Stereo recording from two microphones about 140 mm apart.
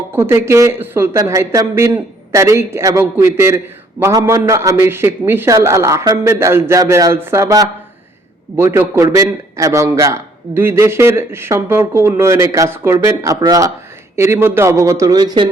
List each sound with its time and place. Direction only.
0.1 s a man's voice: 15° right (ahead or behind)